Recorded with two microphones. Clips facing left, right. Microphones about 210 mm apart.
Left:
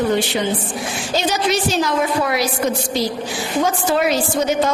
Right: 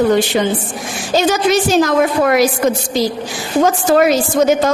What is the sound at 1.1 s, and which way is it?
A woman's voice, 45° right (ahead or behind).